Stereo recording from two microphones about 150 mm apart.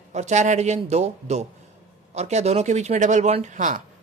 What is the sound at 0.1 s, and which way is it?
A woman's voice, 50° right (ahead or behind).